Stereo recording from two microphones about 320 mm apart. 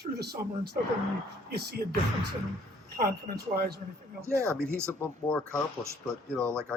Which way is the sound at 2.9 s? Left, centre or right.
Right.